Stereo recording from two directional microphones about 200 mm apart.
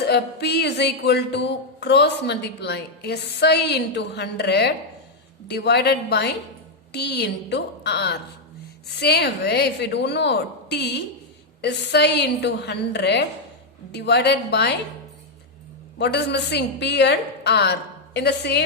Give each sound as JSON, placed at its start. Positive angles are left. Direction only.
{"t": 0.0, "sound": "speech", "side_deg": 55}
{"t": 16.0, "sound": "speech", "side_deg": 55}